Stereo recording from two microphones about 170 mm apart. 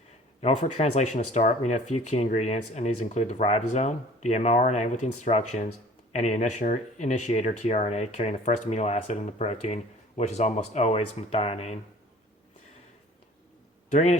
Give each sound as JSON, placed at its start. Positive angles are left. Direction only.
{"t": 0.4, "sound": "speech", "side_deg": 40}
{"t": 13.9, "sound": "speech", "side_deg": 45}